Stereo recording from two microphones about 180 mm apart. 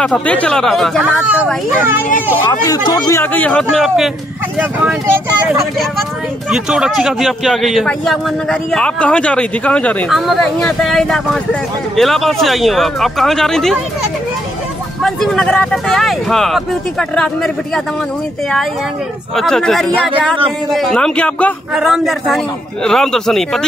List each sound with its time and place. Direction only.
0.0 s a man's voice: 5° left (ahead or behind)
2.6 s a man's voice: 20° left (ahead or behind); by 4.1 s centre (ahead or behind)
5.6 s a man's voice: centre (ahead or behind)
15.0 s a man's voice: 5° left (ahead or behind)
19.3 s a man's voice: 5° left (ahead or behind)